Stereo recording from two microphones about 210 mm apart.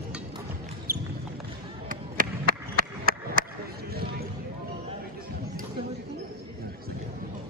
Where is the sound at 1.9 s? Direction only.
40° right (ahead or behind).